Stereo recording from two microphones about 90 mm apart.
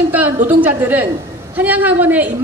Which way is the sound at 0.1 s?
20° right (ahead or behind).